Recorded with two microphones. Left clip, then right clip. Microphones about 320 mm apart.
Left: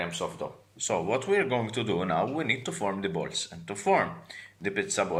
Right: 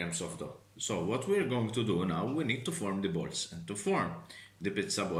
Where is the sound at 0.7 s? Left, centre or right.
Right.